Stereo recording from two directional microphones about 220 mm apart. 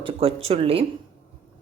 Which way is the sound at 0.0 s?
25° right (ahead or behind).